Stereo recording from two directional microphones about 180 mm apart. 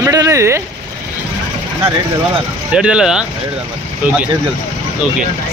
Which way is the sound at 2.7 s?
5° right (ahead or behind).